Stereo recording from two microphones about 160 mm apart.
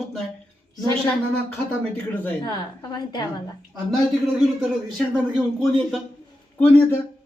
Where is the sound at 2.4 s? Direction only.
25° left (ahead or behind).